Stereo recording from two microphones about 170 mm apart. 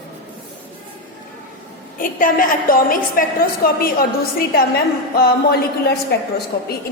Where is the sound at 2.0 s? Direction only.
55° left (ahead or behind).